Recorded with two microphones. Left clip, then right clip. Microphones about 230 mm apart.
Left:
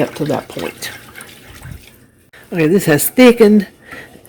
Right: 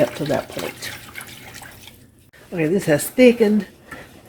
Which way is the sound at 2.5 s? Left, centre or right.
Left.